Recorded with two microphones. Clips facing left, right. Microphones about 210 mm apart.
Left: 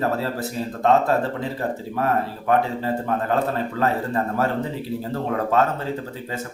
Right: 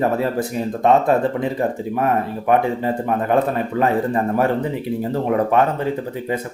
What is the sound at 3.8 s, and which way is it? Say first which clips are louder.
Speech: right 4 dB; 15° right (ahead or behind).